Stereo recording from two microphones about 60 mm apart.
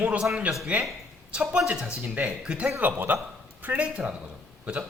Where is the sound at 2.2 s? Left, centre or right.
Centre.